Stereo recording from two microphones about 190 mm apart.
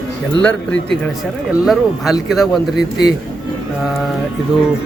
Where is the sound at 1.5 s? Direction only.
Centre (ahead or behind).